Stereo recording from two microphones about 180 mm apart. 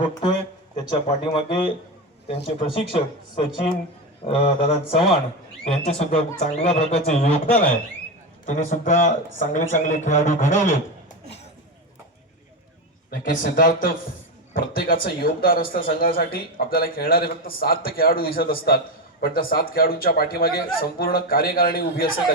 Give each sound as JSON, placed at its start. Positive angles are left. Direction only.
{"t": 0.1, "sound": "a man's voice", "side_deg": 25}
{"t": 8.4, "sound": "a man's voice", "side_deg": 45}
{"t": 13.1, "sound": "a man's voice", "side_deg": 50}